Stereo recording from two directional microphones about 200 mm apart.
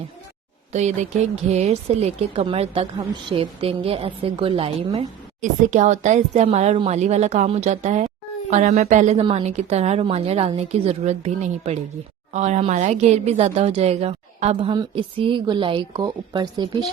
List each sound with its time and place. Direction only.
0.7 s a woman's voice: 35° right (ahead or behind)